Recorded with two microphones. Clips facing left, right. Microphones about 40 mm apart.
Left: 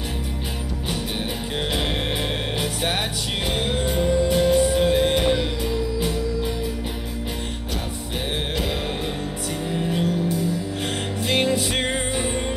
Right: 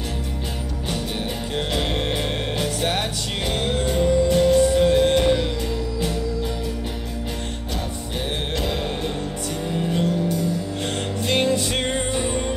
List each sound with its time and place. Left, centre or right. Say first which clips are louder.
1.7 s music: right 1 dB; centre
9.7 s music: right 1 dB; centre